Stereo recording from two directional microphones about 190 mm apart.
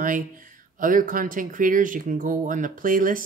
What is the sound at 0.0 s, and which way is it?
Speech, 45° right (ahead or behind).